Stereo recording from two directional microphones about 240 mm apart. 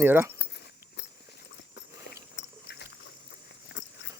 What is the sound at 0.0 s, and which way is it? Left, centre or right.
Speech, centre.